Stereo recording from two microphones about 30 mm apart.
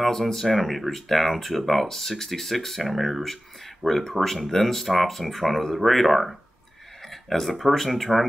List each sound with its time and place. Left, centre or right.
0.0 s speech: centre